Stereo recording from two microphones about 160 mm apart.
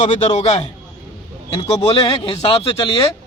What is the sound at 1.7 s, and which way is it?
Speech, 40° left (ahead or behind).